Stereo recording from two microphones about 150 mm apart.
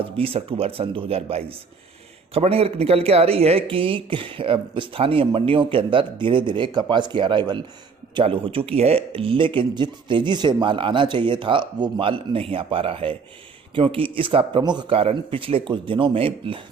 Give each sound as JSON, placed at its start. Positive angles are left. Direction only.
{"t": 0.0, "sound": "speech", "side_deg": -40}